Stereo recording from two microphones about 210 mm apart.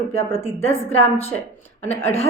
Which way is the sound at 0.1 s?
10° left (ahead or behind).